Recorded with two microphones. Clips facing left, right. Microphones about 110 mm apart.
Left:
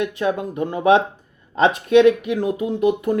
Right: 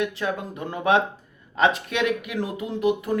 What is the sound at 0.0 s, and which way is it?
Speech, 20° left (ahead or behind).